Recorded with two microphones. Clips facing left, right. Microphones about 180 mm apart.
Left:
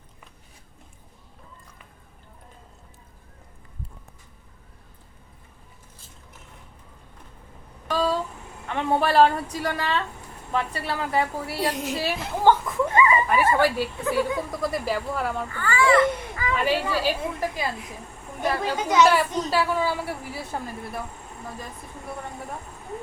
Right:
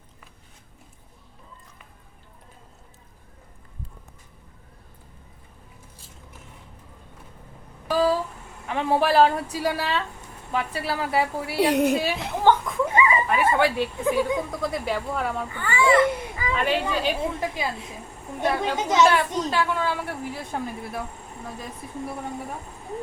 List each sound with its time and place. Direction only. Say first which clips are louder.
7.9 s a sound: right 3 dB; 5° right (ahead or behind)
8.6 s a woman's voice: right 1 dB; 5° right (ahead or behind)
11.5 s a woman's voice: right 9 dB; 65° right (ahead or behind)
11.9 s speech: right 1 dB; centre (ahead or behind)
12.8 s dog: left 2 dB; 10° right (ahead or behind)
13.1 s dog: left 1 dB; centre (ahead or behind)
14.0 s speech: right 2 dB; 15° right (ahead or behind)
14.5 s a woman's voice: left 1 dB; centre (ahead or behind)
15.4 s babbling: even; 20° right (ahead or behind)
16.6 s a woman's voice: even; 5° left (ahead or behind)
18.8 s speech: left 1 dB; 25° right (ahead or behind)
19.1 s a woman's voice: even; 5° left (ahead or behind)